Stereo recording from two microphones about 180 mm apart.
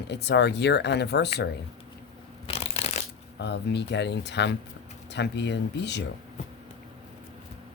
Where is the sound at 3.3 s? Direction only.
70° left (ahead or behind).